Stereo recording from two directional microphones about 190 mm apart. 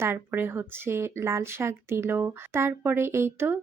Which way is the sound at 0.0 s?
10° right (ahead or behind).